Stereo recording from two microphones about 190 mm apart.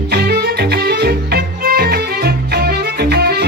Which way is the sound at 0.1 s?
60° right (ahead or behind).